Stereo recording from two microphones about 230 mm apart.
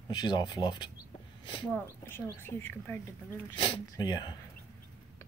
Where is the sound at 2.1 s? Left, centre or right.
Centre.